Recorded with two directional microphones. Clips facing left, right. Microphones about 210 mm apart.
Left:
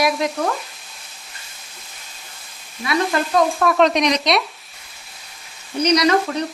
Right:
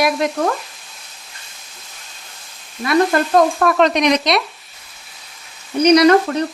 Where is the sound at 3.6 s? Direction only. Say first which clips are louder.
Right 1 dB; centre (ahead or behind).